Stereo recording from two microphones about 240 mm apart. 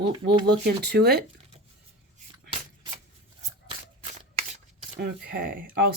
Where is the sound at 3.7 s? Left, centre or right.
Right.